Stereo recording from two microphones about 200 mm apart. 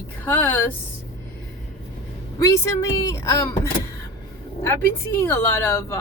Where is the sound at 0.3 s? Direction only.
10° left (ahead or behind).